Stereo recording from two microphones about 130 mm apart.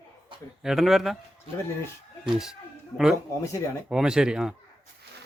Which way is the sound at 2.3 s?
5° right (ahead or behind).